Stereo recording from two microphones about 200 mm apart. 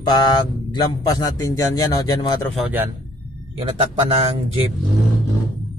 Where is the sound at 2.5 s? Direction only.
10° right (ahead or behind).